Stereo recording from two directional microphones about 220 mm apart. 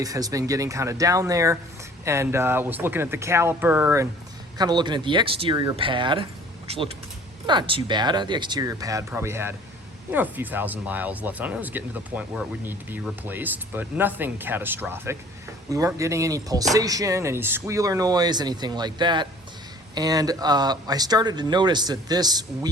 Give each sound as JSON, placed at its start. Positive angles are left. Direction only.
{"t": 0.0, "sound": "speech", "side_deg": -15}